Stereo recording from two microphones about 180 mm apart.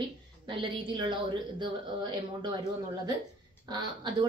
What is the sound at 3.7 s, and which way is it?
Speech, 25° right (ahead or behind).